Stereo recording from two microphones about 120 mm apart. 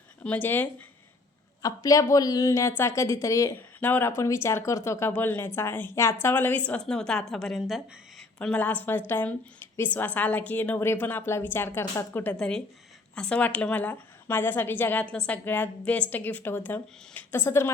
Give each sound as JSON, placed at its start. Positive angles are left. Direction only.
{"t": 0.2, "sound": "a woman's voice", "side_deg": 15}
{"t": 1.6, "sound": "speech", "side_deg": 30}
{"t": 3.8, "sound": "a woman's voice", "side_deg": 15}